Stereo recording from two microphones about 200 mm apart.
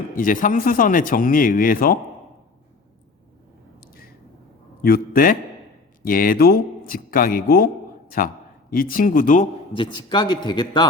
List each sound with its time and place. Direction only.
0.2 s speech: 45° left (ahead or behind)
4.8 s speech: 45° left (ahead or behind)
9.7 s a man's voice: 25° left (ahead or behind)